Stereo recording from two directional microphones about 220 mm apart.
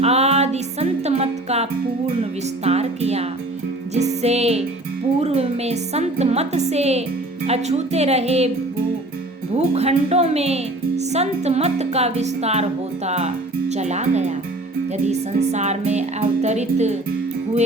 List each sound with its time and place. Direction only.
0.0 s music: 30° right (ahead or behind)
2.6 s speech: 30° right (ahead or behind)
3.9 s music: 30° right (ahead or behind)
5.2 s speech: 30° right (ahead or behind)
9.6 s speech: 30° right (ahead or behind)